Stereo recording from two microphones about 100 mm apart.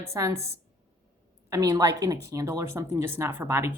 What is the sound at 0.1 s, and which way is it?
Speech, 30° right (ahead or behind).